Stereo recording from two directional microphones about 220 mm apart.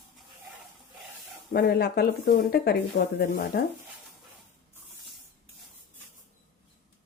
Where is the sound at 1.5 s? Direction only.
45° left (ahead or behind).